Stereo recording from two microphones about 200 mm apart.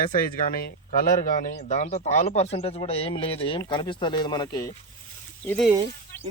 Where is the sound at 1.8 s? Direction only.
35° left (ahead or behind); by 4.7 s 20° left (ahead or behind).